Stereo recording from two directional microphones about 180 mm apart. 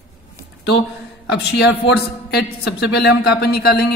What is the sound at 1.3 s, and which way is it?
A man's voice, 70° left (ahead or behind).